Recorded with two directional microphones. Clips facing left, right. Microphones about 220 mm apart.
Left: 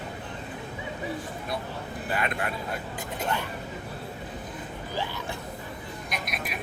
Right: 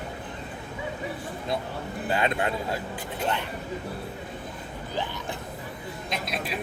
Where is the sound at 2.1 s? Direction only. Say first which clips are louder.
Right 4 dB; 25° right (ahead or behind).